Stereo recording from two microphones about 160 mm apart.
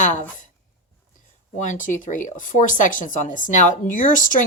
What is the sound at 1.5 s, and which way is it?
Speech, 50° left (ahead or behind).